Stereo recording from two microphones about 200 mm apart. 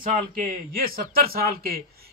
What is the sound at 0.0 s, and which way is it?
A man's voice, 45° right (ahead or behind).